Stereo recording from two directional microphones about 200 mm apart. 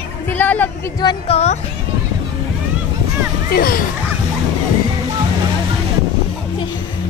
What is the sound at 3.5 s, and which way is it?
Music, 50° left (ahead or behind).